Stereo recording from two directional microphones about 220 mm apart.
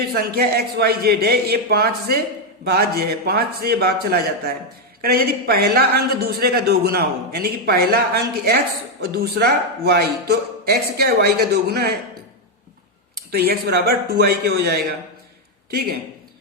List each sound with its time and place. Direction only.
0.0 s a man's voice: 45° right (ahead or behind)
13.3 s a man's voice: 45° right (ahead or behind)